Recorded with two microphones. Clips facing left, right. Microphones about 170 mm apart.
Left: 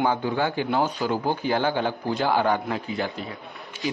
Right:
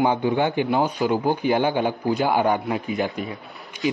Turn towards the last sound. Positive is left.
turn(degrees=-15)  # may be behind; listen again after turning